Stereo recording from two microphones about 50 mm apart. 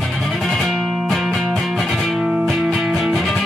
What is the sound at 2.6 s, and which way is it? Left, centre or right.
Music, centre.